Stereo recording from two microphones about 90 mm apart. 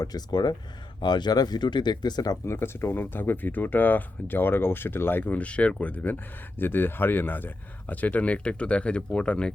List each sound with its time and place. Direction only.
0.0 s speech: 45° left (ahead or behind)
2.6 s speech: 25° left (ahead or behind)